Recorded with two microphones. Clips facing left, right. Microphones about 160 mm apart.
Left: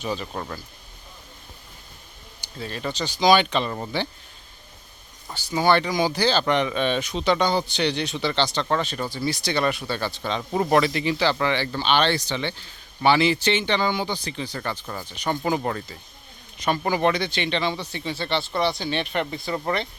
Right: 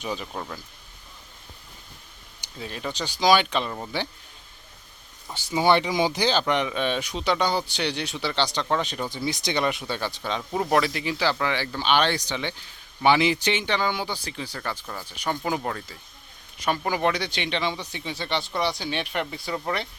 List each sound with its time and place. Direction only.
0.2 s speech: centre (ahead or behind)
2.6 s speech: 5° right (ahead or behind)
5.6 s speech: 20° right (ahead or behind)
6.4 s speech: 5° right (ahead or behind)
10.5 s speech: centre (ahead or behind)
15.3 s speech: 5° left (ahead or behind)
17.0 s speech: 10° right (ahead or behind)